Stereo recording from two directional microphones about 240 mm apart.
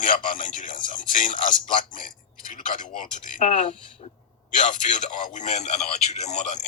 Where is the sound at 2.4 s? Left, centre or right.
Left.